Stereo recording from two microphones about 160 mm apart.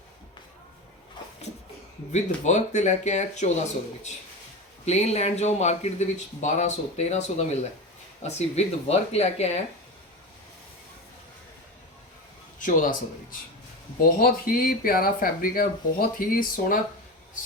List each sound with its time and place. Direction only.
2.1 s speech: 50° left (ahead or behind)
4.9 s speech: 40° left (ahead or behind)
12.5 s speech: 55° left (ahead or behind)
14.0 s speech: 65° left (ahead or behind)